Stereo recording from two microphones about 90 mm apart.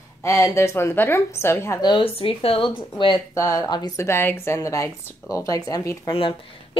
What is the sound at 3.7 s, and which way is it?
Speech, 50° left (ahead or behind).